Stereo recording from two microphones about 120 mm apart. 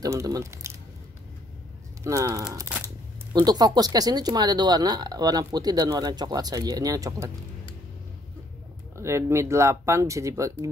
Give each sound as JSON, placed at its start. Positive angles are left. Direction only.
{"t": 0.0, "sound": "speech", "side_deg": -25}
{"t": 2.0, "sound": "speech", "side_deg": -30}
{"t": 8.9, "sound": "speech", "side_deg": -25}